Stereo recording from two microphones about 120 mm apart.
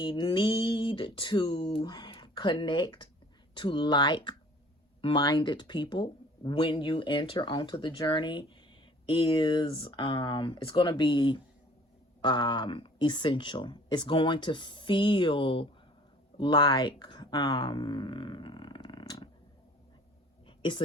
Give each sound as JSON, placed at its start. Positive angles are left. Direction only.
{"t": 0.0, "sound": "speech", "side_deg": 45}
{"t": 20.6, "sound": "a woman's voice", "side_deg": 45}